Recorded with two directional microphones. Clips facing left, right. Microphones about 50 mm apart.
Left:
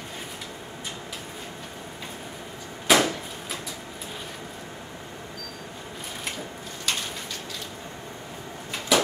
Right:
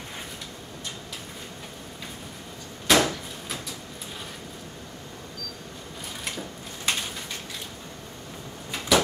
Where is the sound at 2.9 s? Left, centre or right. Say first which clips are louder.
Left 1 dB; centre.